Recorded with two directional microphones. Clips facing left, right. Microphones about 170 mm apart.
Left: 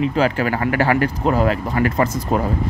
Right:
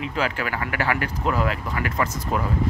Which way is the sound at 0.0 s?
35° left (ahead or behind).